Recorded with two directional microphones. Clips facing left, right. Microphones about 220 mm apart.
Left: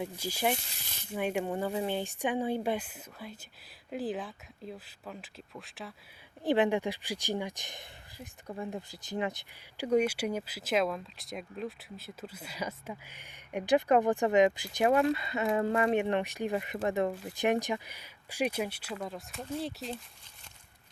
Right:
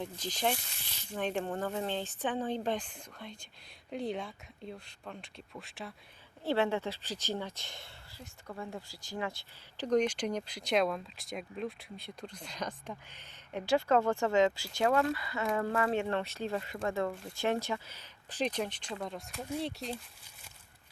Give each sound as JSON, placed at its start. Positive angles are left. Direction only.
{"t": 0.0, "sound": "speech", "side_deg": 10}
{"t": 6.4, "sound": "speech", "side_deg": 15}